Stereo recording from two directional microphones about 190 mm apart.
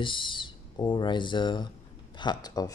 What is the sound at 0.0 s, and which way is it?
Speech, 25° left (ahead or behind).